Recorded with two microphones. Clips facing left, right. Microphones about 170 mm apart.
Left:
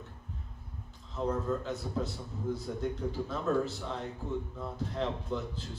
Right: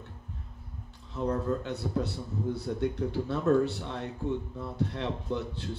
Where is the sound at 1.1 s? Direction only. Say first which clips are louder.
Right 2 dB; 70° right (ahead or behind).